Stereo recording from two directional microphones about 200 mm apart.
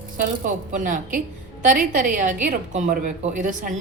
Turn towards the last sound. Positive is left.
turn(degrees=-40)  # may be behind; listen again after turning